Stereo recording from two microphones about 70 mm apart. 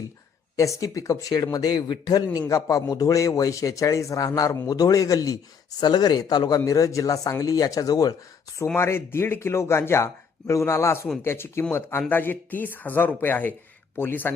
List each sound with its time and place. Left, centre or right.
0.5 s a man's voice: left
1.5 s a man's voice: left
2.5 s a man's voice: left
5.8 s a man's voice: left
6.7 s speech: left
8.6 s speech: left
12.0 s speech: left